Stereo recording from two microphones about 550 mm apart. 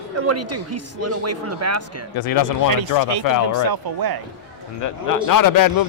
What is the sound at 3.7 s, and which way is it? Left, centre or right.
Speech, right.